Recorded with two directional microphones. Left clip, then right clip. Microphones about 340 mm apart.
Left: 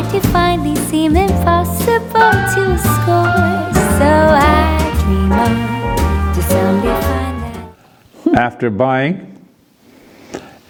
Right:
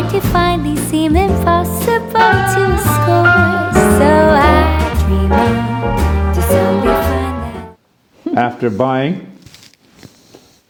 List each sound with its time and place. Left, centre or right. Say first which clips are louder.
0.1 s music: left 1 dB; centre
8.4 s speech: right 3 dB; left